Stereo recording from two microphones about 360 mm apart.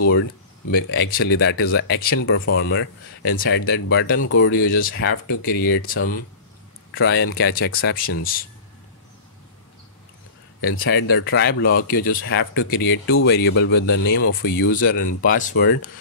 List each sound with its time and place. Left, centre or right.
0.7 s speech: left
10.6 s speech: left